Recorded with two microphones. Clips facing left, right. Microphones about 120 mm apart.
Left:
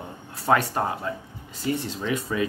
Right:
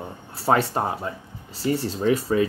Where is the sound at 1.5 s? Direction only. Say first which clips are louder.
Right 3 dB; 35° right (ahead or behind).